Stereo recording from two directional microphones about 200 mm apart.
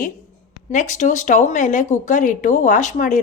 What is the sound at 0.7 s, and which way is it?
Speech, 35° left (ahead or behind).